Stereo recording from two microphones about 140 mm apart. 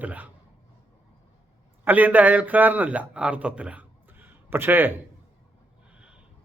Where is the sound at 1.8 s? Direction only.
10° right (ahead or behind).